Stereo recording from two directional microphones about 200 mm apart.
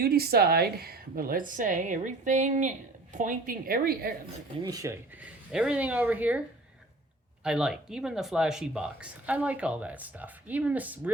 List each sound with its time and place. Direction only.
0.0 s a woman's voice: 50° right (ahead or behind)
4.6 s speech: 15° right (ahead or behind)
7.4 s speech: 5° right (ahead or behind)